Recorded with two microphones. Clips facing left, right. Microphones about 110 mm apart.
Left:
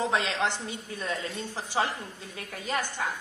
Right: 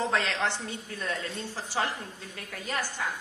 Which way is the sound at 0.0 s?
15° left (ahead or behind).